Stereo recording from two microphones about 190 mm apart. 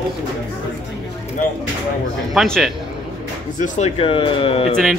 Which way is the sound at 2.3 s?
Centre (ahead or behind).